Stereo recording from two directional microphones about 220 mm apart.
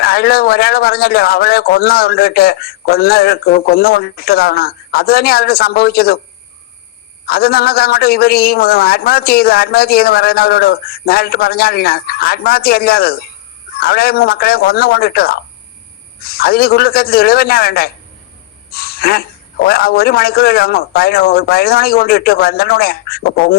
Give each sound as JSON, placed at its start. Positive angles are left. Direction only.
{"t": 0.0, "sound": "a man's voice", "side_deg": 45}
{"t": 7.3, "sound": "a man's voice", "side_deg": 45}